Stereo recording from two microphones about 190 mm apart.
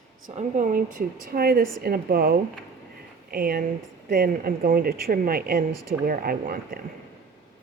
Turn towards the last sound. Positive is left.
turn(degrees=-50)  # may be behind; listen again after turning